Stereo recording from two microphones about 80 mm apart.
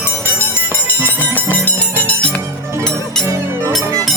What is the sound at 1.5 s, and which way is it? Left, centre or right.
Music, centre.